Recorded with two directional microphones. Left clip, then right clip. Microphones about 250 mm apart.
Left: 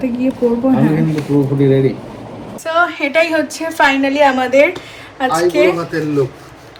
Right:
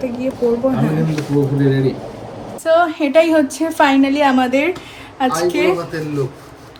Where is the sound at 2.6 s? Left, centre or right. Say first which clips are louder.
Right 1 dB; centre.